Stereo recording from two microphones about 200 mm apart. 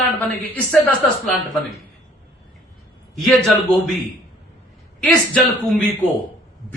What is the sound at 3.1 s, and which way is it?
Speech, centre (ahead or behind).